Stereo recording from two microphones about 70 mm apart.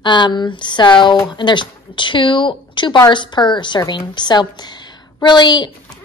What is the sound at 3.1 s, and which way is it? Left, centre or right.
A woman's voice, left.